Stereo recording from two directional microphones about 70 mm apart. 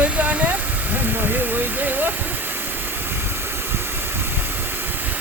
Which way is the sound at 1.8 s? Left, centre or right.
Right.